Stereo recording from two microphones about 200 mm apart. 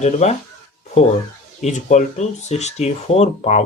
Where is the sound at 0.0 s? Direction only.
35° left (ahead or behind).